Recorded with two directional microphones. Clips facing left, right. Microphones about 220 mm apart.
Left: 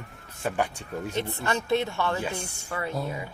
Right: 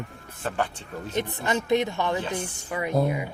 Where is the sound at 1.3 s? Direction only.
15° right (ahead or behind).